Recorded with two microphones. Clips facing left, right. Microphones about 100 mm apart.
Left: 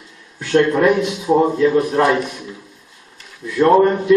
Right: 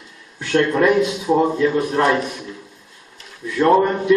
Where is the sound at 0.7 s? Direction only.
5° left (ahead or behind).